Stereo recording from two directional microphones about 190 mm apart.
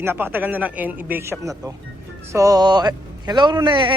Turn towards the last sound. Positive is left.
turn(degrees=-25)  # may be behind; listen again after turning